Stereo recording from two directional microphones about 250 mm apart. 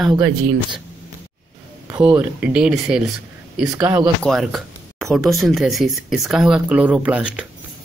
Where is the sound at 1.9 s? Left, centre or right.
Centre.